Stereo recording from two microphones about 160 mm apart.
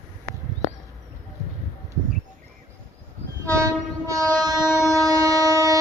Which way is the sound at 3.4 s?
20° right (ahead or behind).